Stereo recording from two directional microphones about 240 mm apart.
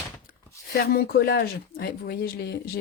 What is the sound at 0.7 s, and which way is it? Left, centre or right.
Speech, left.